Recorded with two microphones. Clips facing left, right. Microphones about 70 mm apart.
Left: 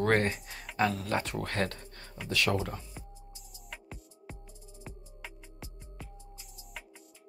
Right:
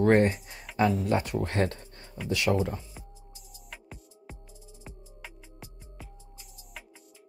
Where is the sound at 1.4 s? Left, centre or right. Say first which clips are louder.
Right 4 dB; right.